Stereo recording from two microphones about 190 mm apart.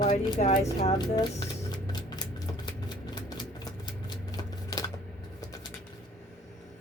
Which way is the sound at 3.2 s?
20° left (ahead or behind).